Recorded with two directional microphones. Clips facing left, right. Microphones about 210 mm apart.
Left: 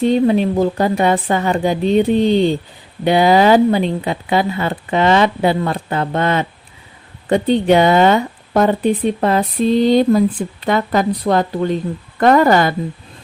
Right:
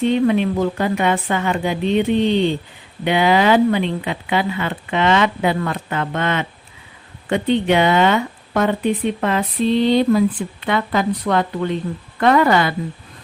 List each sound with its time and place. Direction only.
0.0 s a woman's voice: 35° left (ahead or behind)